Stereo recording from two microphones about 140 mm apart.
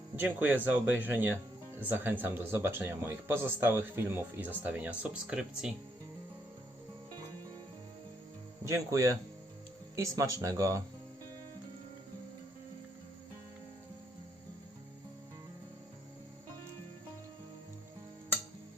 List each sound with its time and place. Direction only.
0.2 s speech: 15° right (ahead or behind)
8.6 s speech: 20° right (ahead or behind)